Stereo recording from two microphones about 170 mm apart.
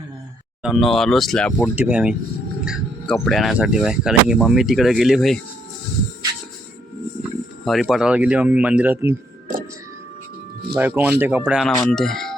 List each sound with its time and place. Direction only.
0.6 s speech: centre (ahead or behind)
7.2 s speech: centre (ahead or behind)
10.8 s speech: 10° right (ahead or behind)